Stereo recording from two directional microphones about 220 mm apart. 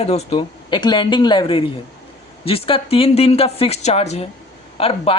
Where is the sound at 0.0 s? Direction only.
30° left (ahead or behind).